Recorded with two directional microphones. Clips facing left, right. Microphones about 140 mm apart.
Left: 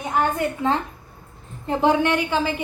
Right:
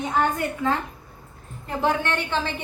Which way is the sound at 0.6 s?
20° left (ahead or behind).